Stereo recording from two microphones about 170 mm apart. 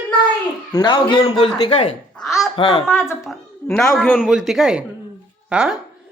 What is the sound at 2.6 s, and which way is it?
Speech, 30° left (ahead or behind).